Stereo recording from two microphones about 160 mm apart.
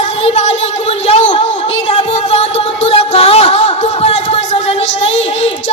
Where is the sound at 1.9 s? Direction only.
40° left (ahead or behind).